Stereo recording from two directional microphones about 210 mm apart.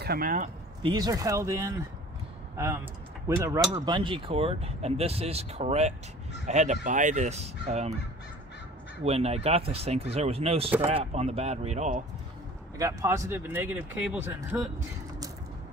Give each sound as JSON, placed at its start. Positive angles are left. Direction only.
{"t": 0.0, "sound": "speech", "side_deg": -45}
{"t": 0.8, "sound": "speech", "side_deg": -20}
{"t": 9.0, "sound": "speech", "side_deg": -30}
{"t": 12.7, "sound": "speech", "side_deg": -15}